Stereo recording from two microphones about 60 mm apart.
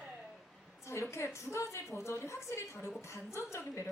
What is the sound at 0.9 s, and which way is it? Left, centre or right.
A woman's voice, left.